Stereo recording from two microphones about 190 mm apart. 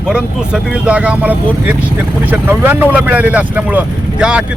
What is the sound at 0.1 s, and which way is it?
Speech, 5° right (ahead or behind).